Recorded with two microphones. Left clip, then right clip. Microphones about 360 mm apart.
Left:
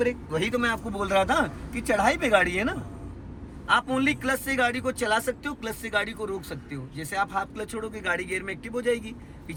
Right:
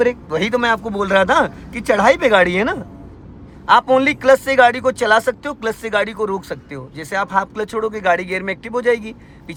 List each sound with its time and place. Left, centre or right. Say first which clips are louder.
0.0 s a man's voice: right 9 dB; centre